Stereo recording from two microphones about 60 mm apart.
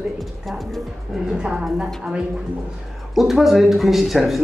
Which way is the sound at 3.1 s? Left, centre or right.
Centre.